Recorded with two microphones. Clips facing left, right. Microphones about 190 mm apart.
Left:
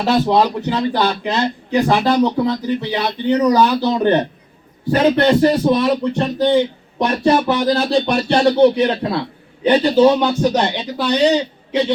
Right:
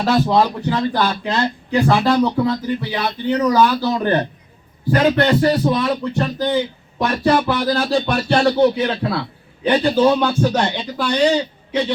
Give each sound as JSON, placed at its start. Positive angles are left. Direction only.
{"t": 0.0, "sound": "a man's voice", "side_deg": 15}